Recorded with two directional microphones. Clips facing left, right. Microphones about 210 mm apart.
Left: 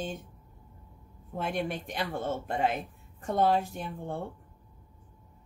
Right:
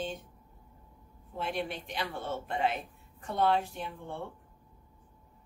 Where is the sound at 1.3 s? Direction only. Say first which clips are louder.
Left 3 dB; 50° left (ahead or behind).